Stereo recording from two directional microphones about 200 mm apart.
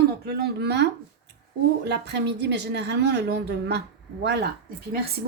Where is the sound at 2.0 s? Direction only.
55° right (ahead or behind).